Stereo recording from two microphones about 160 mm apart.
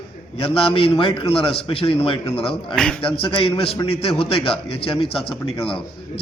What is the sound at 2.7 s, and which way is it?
Speech, 5° left (ahead or behind).